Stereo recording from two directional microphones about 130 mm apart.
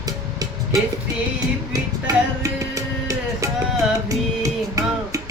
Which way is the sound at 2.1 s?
30° right (ahead or behind).